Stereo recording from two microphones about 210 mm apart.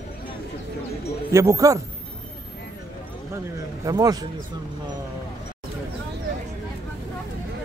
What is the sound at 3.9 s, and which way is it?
Speech, 15° right (ahead or behind).